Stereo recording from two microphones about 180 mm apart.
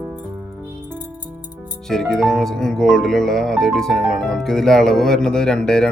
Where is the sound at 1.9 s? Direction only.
Centre (ahead or behind).